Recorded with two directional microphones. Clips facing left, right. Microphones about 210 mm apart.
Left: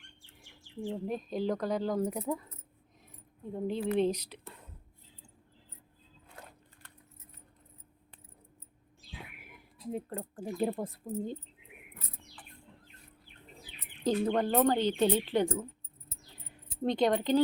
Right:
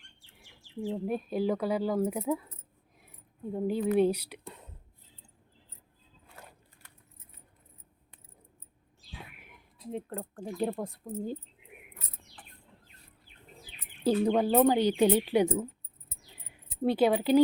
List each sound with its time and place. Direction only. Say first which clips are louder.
0.3 s speech: right 3 dB; 5° right (ahead or behind)
3.8 s speech: right 4 dB; 10° right (ahead or behind)
9.9 s speech: right 1 dB; centre (ahead or behind)
14.0 s speech: right 3 dB; 10° right (ahead or behind)
16.8 s speech: right 3 dB; 5° right (ahead or behind)